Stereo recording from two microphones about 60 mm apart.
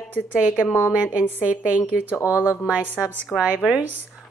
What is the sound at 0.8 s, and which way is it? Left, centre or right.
A woman's voice, centre.